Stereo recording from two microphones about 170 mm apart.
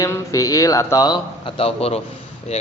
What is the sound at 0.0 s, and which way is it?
A man's voice, 20° left (ahead or behind).